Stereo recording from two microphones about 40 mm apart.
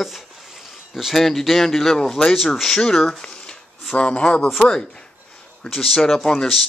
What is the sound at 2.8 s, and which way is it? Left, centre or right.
Speech, centre.